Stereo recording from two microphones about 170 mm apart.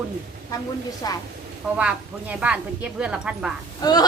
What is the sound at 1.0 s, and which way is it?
Speech, 25° left (ahead or behind).